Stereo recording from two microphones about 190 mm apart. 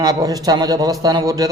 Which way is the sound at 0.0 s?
20° right (ahead or behind).